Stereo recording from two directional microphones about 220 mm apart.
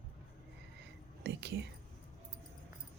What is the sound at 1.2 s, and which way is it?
Speech, 50° right (ahead or behind).